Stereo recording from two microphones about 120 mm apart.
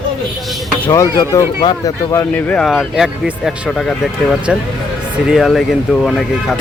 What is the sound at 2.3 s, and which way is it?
Speech, 10° left (ahead or behind).